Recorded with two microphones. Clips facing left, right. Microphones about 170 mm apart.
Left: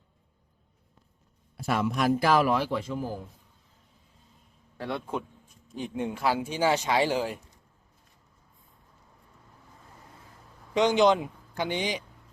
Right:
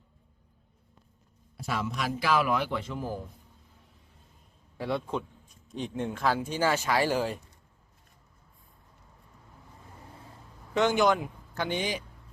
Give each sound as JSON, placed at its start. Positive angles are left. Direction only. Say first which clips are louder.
{"t": 1.5, "sound": "a man's voice", "louder": "left 5 dB", "side_deg": 55}
{"t": 2.6, "sound": "speech", "louder": "left 2 dB", "side_deg": 10}
{"t": 4.8, "sound": "a man's voice", "louder": "right 1 dB", "side_deg": 0}
{"t": 10.8, "sound": "speech", "louder": "left 3 dB", "side_deg": 20}